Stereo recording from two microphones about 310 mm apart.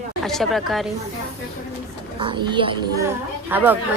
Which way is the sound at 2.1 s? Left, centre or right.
Centre.